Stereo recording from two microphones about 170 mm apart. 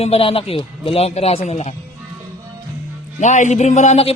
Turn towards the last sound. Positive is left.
turn(degrees=40)  # may be behind; listen again after turning